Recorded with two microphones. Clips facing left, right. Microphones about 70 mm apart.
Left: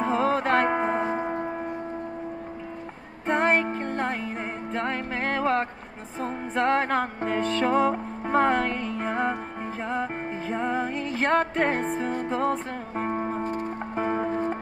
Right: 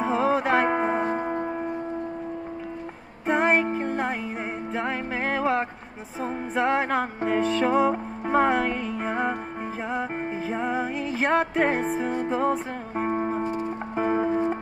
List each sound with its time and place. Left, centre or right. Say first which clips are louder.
0.0 s music: right 1 dB; centre
3.3 s music: right 1 dB; centre
13.5 s music: right 1 dB; left
13.9 s music: right 3 dB; centre